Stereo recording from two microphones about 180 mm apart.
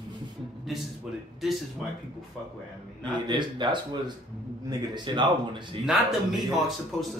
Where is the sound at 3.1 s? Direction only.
25° right (ahead or behind).